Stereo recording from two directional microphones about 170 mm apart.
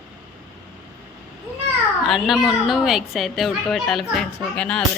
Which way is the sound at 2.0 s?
Centre (ahead or behind).